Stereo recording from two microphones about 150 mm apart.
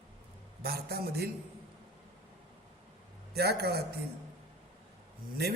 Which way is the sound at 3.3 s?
90° right.